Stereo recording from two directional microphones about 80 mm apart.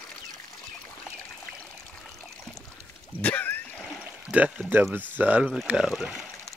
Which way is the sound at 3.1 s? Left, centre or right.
Left.